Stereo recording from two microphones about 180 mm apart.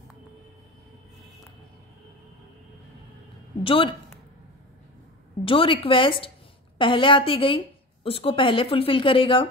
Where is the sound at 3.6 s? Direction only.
30° left (ahead or behind).